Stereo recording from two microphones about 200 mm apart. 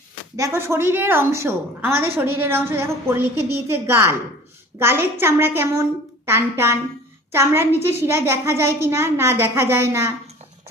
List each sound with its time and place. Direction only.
0.3 s a woman's voice: 15° right (ahead or behind)